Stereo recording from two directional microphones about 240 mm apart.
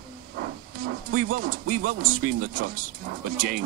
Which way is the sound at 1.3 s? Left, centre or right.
Right.